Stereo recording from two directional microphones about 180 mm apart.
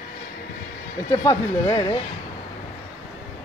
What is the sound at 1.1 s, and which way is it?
Speech, 20° left (ahead or behind).